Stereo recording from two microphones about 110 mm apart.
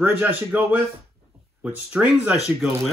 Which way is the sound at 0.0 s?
15° right (ahead or behind).